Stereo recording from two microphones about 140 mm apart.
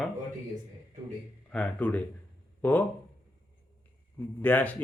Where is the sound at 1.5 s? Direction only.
10° left (ahead or behind).